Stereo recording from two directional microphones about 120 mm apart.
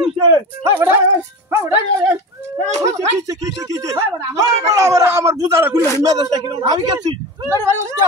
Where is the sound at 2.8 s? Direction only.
30° right (ahead or behind).